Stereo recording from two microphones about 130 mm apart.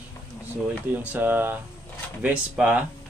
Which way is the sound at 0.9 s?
15° right (ahead or behind).